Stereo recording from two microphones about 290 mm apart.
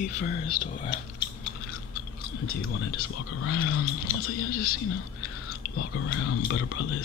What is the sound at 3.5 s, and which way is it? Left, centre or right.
Speech, left.